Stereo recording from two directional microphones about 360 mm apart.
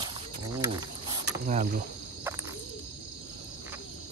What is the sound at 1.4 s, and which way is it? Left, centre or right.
Speech, right.